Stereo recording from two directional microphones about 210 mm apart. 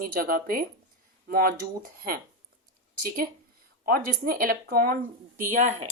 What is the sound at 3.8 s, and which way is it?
Speech, 45° right (ahead or behind).